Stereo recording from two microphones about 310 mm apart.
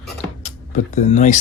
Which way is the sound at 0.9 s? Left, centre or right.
Left.